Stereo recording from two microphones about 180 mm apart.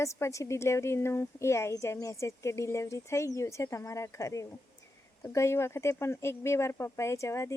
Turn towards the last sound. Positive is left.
turn(degrees=15)  # may be behind; listen again after turning